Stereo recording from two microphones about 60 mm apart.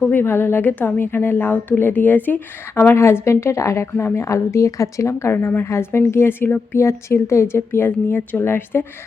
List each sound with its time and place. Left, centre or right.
0.1 s a woman's voice: left
2.9 s speech: left
3.9 s speech: left
6.8 s a woman's voice: left